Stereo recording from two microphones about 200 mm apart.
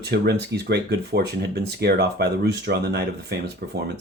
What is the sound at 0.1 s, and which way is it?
Speech, 55° right (ahead or behind).